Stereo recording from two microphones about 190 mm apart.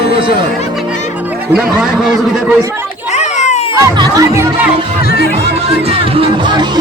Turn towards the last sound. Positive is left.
turn(degrees=-25)  # may be behind; listen again after turning